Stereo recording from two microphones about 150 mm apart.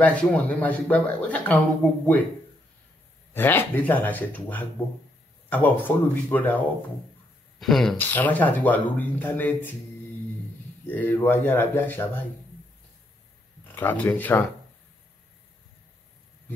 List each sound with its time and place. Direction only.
0.0 s speech: 10° left (ahead or behind)
3.3 s speech: 15° left (ahead or behind)
10.9 s speech: 15° left (ahead or behind)
13.7 s speech: 10° left (ahead or behind)